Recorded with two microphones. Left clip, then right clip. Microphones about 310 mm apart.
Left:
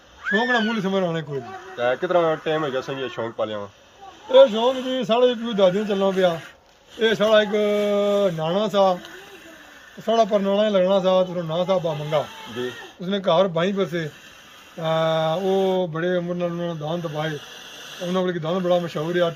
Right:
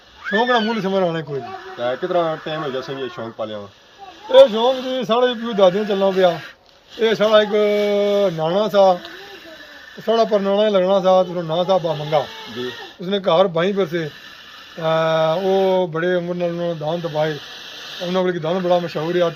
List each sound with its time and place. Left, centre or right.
0.3 s mantra: centre
1.8 s speech: centre
4.3 s mantra: centre
10.1 s mantra: centre